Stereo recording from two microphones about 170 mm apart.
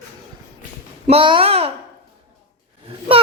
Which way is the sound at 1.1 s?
30° right (ahead or behind).